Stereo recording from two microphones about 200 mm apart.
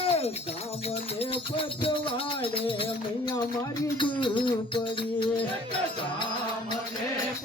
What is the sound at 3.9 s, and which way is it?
Music, 25° left (ahead or behind).